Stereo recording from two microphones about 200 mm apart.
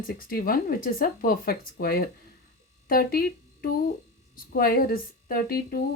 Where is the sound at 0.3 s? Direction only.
45° left (ahead or behind).